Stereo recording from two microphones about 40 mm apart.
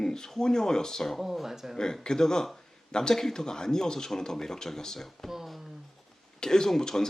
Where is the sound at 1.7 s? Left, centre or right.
Centre.